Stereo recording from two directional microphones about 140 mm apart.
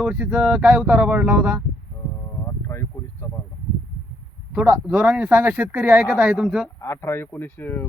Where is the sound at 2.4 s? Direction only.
20° left (ahead or behind).